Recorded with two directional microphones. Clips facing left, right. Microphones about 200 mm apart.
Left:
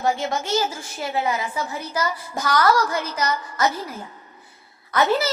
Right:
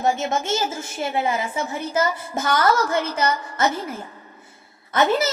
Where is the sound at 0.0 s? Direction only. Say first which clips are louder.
Right 1 dB; 25° right (ahead or behind).